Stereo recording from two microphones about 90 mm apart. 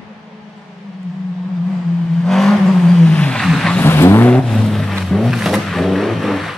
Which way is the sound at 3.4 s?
5° left (ahead or behind).